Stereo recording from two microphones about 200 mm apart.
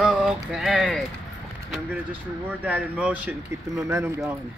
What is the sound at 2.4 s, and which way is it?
Speech, 5° right (ahead or behind).